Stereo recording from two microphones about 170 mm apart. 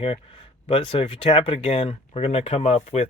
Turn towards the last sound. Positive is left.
turn(degrees=35)  # may be behind; listen again after turning